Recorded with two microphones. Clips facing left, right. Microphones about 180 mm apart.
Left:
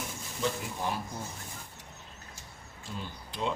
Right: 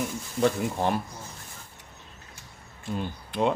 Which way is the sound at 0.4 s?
60° right (ahead or behind).